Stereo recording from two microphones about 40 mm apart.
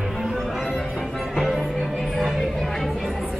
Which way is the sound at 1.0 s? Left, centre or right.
Centre.